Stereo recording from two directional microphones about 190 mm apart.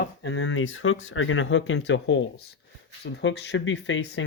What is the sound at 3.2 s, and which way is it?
Speech, 65° left (ahead or behind).